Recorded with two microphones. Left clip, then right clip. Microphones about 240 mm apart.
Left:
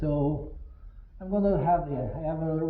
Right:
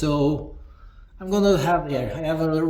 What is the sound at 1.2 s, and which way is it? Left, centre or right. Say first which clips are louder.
Speech: right 7 dB; centre.